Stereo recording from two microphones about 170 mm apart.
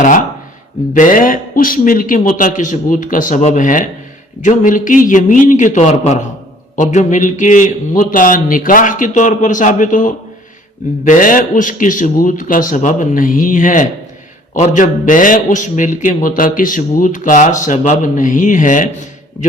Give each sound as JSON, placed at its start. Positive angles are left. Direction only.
{"t": 0.9, "sound": "a man's voice", "side_deg": 50}